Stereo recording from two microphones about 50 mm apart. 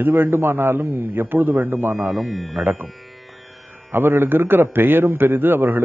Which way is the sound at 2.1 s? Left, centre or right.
Centre.